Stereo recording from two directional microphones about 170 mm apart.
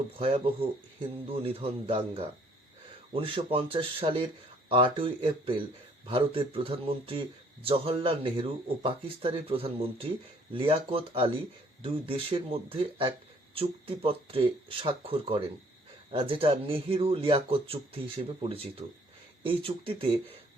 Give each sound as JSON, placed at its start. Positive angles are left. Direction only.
{"t": 0.2, "sound": "a man's voice", "side_deg": -35}